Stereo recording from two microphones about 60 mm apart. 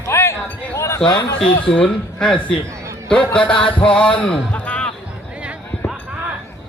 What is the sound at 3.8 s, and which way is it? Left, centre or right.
Speech, centre.